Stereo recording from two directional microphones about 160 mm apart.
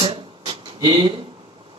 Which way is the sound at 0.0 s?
30° right (ahead or behind).